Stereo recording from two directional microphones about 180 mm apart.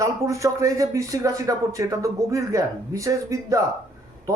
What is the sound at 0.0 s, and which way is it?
Speech, 15° right (ahead or behind).